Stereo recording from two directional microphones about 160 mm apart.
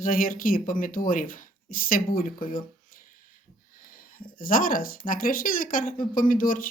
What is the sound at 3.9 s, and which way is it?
Speech, 60° left (ahead or behind).